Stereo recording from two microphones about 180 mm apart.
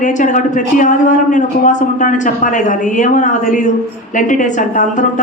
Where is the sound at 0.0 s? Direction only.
45° left (ahead or behind).